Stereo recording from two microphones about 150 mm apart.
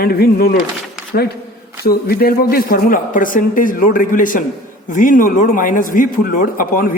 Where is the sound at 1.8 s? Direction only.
90° left; by 6.9 s 70° left (ahead or behind).